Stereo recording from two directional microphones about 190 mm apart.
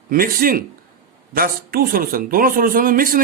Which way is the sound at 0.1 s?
50° right (ahead or behind).